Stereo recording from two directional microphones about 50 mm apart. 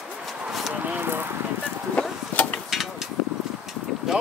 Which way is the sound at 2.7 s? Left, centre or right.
Centre.